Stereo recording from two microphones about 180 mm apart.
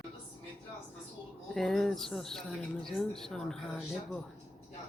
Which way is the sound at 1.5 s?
Centre (ahead or behind).